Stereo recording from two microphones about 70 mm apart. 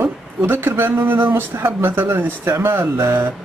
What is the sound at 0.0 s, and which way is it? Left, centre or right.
Speech, right.